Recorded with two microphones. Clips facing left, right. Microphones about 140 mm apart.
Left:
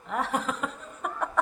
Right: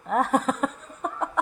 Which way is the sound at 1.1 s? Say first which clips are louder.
Even; 20° right (ahead or behind).